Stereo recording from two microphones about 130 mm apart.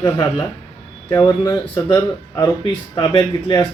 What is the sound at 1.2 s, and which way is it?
Speech, 35° left (ahead or behind).